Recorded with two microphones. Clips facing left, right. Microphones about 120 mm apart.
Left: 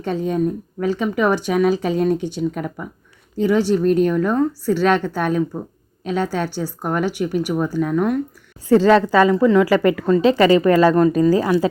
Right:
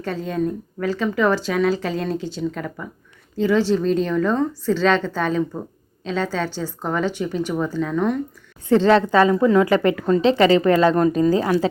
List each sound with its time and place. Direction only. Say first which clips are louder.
0.0 s speech: left 3 dB; 20° left (ahead or behind)
8.8 s a woman's voice: even; 25° right (ahead or behind)